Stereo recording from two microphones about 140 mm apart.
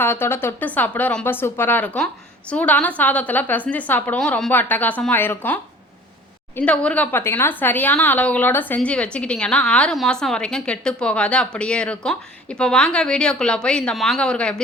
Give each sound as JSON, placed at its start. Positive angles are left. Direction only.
{"t": 0.0, "sound": "a woman's voice", "side_deg": 15}
{"t": 6.6, "sound": "a woman's voice", "side_deg": 10}